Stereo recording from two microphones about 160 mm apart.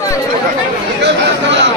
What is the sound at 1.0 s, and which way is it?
Chatter, 90° right.